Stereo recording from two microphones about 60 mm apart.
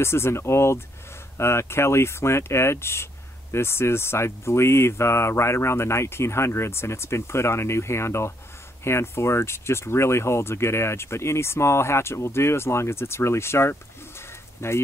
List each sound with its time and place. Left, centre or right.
0.0 s speech: left